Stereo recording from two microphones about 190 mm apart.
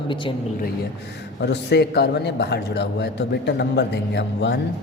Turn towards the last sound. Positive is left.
turn(degrees=65)  # may be behind; listen again after turning